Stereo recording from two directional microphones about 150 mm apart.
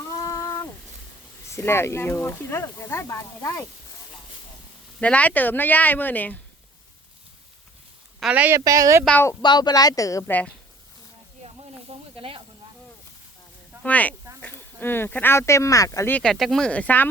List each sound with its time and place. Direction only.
0.2 s a sound: 20° left (ahead or behind)
1.5 s speech: 15° left (ahead or behind)
4.9 s speech: 10° left (ahead or behind)
8.2 s speech: 10° right (ahead or behind)
9.0 s speech: 10° left (ahead or behind)
9.4 s speech: 30° left (ahead or behind)
11.4 s snake: 40° right (ahead or behind)
13.8 s speech: 10° left (ahead or behind)
16.1 s speech: 5° left (ahead or behind)